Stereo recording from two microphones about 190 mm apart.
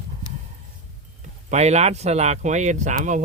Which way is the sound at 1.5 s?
35° right (ahead or behind).